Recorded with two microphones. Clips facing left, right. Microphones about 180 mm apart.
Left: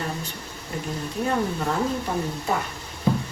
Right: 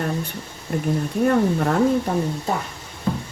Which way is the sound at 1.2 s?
55° right (ahead or behind).